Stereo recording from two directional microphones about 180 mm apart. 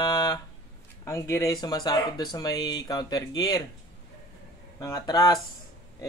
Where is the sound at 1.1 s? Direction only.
15° left (ahead or behind).